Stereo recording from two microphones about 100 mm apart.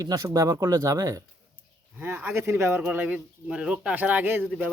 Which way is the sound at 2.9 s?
15° right (ahead or behind).